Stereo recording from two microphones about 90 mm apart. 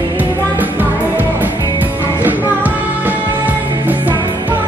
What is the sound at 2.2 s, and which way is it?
Music, 20° right (ahead or behind).